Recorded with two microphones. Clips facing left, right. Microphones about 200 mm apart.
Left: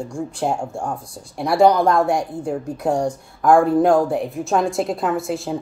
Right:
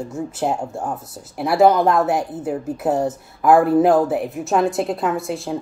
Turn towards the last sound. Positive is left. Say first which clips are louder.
# left 1 dB
turn(degrees=0)  # may be behind; listen again after turning